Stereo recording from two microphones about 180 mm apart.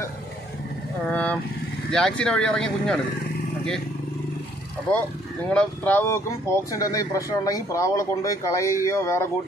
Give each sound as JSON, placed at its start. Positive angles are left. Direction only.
{"t": 1.1, "sound": "vehicle", "side_deg": 10}
{"t": 1.9, "sound": "speech", "side_deg": 5}
{"t": 5.5, "sound": "speech", "side_deg": 10}